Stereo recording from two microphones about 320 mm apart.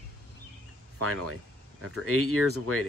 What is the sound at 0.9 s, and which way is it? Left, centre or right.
Speech, right.